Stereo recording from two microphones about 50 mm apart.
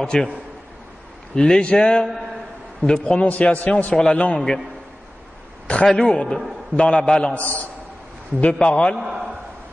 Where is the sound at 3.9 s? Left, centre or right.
Centre.